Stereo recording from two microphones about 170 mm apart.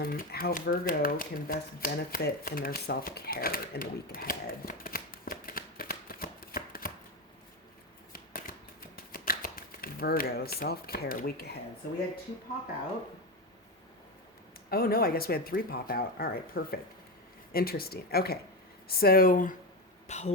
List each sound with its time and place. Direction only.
0.0 s speech: 60° left (ahead or behind)
8.1 s shuffling cards: 60° left (ahead or behind)
9.1 s speech: 55° left (ahead or behind)
14.7 s speech: 60° left (ahead or behind)
20.1 s speech: 40° left (ahead or behind)